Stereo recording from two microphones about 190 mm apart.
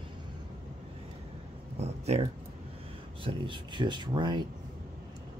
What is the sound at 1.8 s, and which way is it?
Speech, 35° right (ahead or behind).